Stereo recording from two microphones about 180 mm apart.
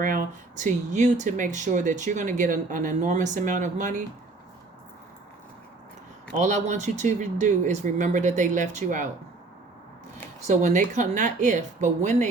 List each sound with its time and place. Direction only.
0.0 s speech: 45° right (ahead or behind)
6.4 s speech: 40° right (ahead or behind)
10.4 s speech: 40° right (ahead or behind)